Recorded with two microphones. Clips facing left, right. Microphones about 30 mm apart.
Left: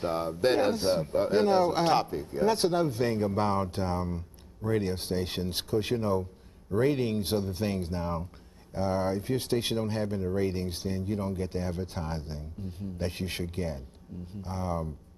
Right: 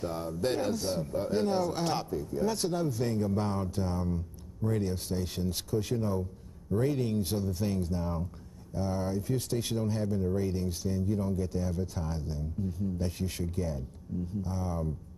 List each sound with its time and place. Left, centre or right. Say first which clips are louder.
0.0 s speech: left 5 dB; left